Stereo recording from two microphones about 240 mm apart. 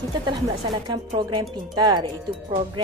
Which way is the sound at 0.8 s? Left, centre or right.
Centre.